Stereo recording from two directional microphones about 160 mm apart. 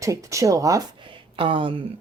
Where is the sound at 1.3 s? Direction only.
35° right (ahead or behind).